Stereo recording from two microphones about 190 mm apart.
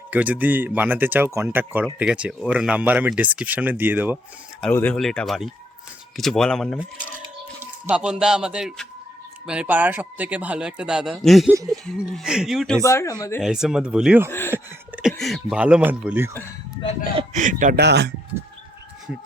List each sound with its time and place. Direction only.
0.1 s speech: 10° right (ahead or behind)
4.6 s speech: 10° left (ahead or behind)
12.8 s speech: 15° left (ahead or behind)
13.4 s speech: 5° right (ahead or behind)
14.3 s a sound: 10° left (ahead or behind)
14.5 s speech: 5° right (ahead or behind)
17.2 s a man's voice: 40° right (ahead or behind)
17.7 s speech: 60° right (ahead or behind)